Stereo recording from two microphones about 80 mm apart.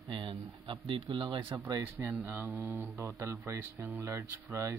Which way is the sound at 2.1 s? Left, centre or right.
Right.